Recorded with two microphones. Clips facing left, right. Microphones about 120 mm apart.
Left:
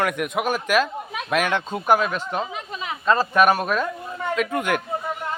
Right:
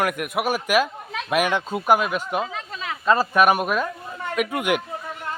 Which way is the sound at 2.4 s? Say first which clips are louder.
Even; 20° left (ahead or behind).